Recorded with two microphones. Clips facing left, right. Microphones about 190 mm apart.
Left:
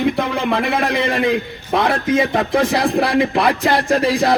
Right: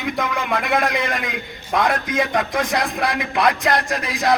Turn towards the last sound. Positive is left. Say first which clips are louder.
# left 7 dB
turn(degrees=30)  # may be behind; listen again after turning